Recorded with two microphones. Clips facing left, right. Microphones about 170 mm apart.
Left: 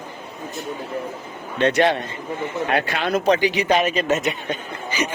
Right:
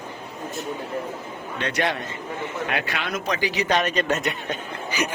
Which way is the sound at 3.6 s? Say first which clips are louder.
Left 1 dB; 5° left (ahead or behind).